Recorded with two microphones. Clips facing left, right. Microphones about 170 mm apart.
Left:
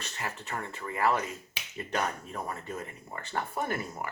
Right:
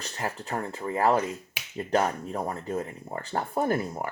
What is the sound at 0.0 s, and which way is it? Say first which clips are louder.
Speech: right 5 dB; 35° right (ahead or behind).